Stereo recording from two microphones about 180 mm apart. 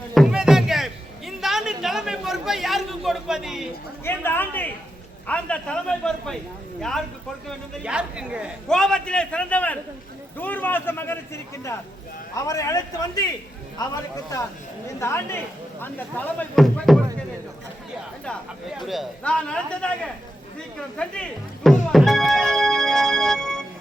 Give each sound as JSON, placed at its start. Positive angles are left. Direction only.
{"t": 0.1, "sound": "music", "side_deg": 0}
{"t": 4.0, "sound": "a man's voice", "side_deg": 10}
{"t": 7.7, "sound": "a man's voice", "side_deg": -5}
{"t": 12.5, "sound": "speech", "side_deg": 20}
{"t": 15.0, "sound": "speech", "side_deg": 15}
{"t": 18.8, "sound": "a man's voice", "side_deg": 0}
{"t": 20.7, "sound": "music", "side_deg": 5}